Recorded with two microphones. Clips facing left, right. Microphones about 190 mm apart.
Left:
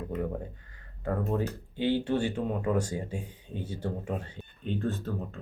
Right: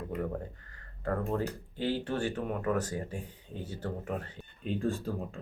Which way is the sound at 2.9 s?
25° left (ahead or behind).